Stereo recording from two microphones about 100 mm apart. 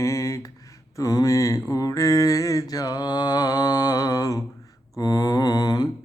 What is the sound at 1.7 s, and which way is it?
Mantra, 35° left (ahead or behind).